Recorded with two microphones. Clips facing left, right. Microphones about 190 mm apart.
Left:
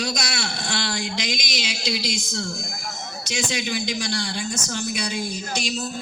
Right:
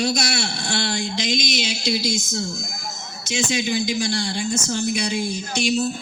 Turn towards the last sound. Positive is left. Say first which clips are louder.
# right 3 dB
turn(degrees=-25)  # may be behind; listen again after turning